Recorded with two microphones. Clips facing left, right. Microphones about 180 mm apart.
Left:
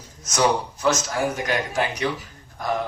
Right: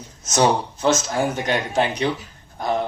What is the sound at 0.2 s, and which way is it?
A man's voice, 25° right (ahead or behind).